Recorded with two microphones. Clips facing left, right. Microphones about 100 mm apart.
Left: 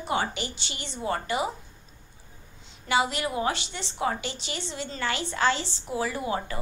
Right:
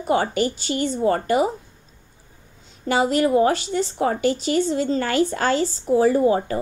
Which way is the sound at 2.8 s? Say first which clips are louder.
Right 7 dB; 40° right (ahead or behind).